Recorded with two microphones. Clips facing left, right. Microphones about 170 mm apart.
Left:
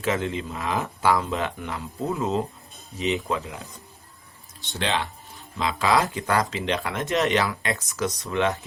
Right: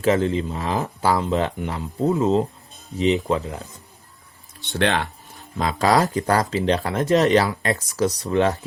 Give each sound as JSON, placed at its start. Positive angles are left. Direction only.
{"t": 0.0, "sound": "speech", "side_deg": -35}
{"t": 4.6, "sound": "speech", "side_deg": -60}
{"t": 5.5, "sound": "speech", "side_deg": -45}